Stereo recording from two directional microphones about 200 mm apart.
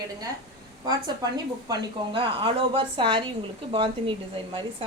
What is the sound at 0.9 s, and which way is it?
Speech, 20° right (ahead or behind).